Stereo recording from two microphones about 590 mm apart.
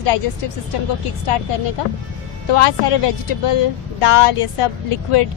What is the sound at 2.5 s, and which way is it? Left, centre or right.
Speech, left.